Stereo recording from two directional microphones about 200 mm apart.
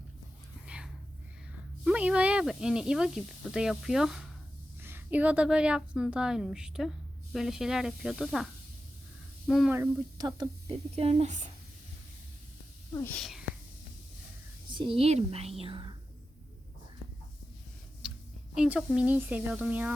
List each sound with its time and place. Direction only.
1.8 s speech: 5° right (ahead or behind)
9.5 s speech: centre (ahead or behind)
9.7 s speech: 15° right (ahead or behind); by 11.3 s 30° right (ahead or behind)
12.9 s speech: 15° left (ahead or behind)
13.1 s speech: centre (ahead or behind)
14.8 s speech: 25° right (ahead or behind)
18.0 s a sound: 5° right (ahead or behind)
18.5 s speech: 5° right (ahead or behind)